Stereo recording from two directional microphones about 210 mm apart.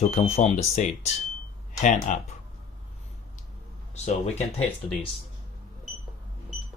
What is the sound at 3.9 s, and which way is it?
Speech, 30° left (ahead or behind).